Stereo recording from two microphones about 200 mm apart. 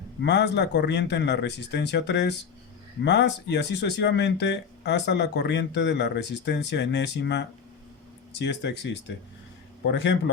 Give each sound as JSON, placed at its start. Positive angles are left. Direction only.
{"t": 0.2, "sound": "speech", "side_deg": 60}